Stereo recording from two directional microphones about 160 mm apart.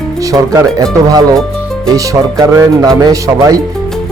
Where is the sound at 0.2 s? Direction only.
20° right (ahead or behind).